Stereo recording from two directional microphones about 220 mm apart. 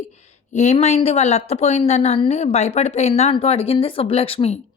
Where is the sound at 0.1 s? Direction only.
30° left (ahead or behind).